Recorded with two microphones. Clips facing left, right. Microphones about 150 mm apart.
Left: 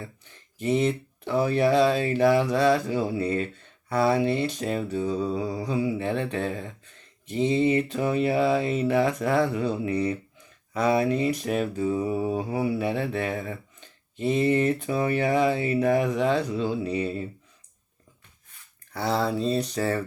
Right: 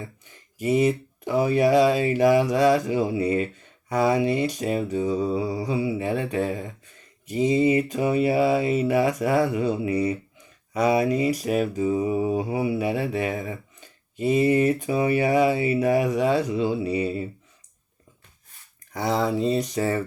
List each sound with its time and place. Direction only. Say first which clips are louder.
0.0 s speech: right 2 dB; 10° right (ahead or behind)
18.9 s speech: right 2 dB; 15° right (ahead or behind)